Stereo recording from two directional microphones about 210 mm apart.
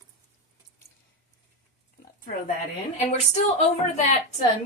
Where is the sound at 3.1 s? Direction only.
30° left (ahead or behind).